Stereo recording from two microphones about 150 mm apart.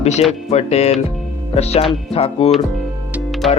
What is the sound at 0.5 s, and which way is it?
Speech, 45° left (ahead or behind).